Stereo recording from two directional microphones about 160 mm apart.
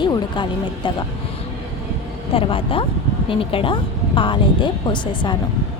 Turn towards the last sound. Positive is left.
turn(degrees=30)  # may be behind; listen again after turning